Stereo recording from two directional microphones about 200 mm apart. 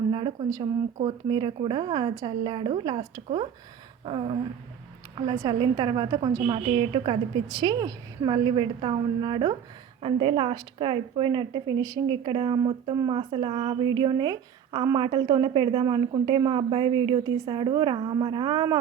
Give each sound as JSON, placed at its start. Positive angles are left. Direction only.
{"t": 0.1, "sound": "a woman's voice", "side_deg": -25}